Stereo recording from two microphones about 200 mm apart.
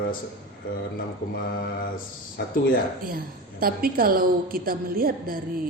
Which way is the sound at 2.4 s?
55° left (ahead or behind).